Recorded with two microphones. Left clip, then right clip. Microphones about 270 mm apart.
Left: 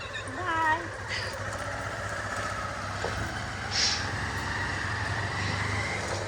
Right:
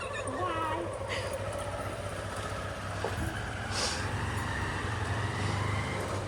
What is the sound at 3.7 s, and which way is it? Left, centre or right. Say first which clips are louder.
Vehicle: left 6 dB; right.